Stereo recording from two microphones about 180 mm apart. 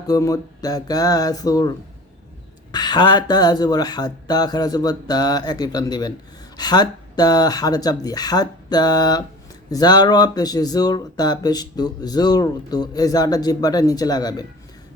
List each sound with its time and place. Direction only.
0.1 s speech: 20° left (ahead or behind)
2.7 s speech: 25° left (ahead or behind)